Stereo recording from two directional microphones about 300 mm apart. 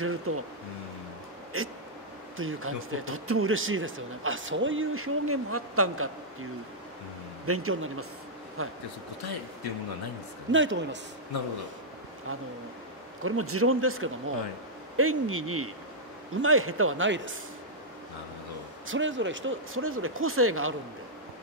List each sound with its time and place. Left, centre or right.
0.0 s speech: right
1.5 s speech: right
7.4 s speech: right
10.5 s a man's voice: right
13.2 s a man's voice: right
18.9 s speech: right